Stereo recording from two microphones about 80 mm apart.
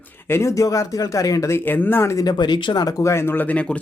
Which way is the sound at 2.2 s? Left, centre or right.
Left.